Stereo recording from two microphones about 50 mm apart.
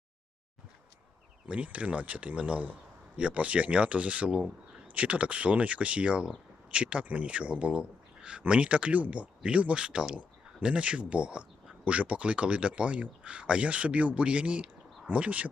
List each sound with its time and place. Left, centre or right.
1.5 s speech: right